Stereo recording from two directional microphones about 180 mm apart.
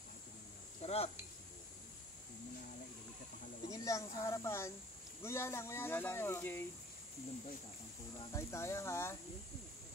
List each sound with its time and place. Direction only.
0.7 s cricket: 35° left (ahead or behind)
3.7 s speech: 15° left (ahead or behind)
8.3 s speech: 15° left (ahead or behind)